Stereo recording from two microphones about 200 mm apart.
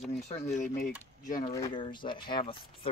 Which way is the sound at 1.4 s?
20° left (ahead or behind).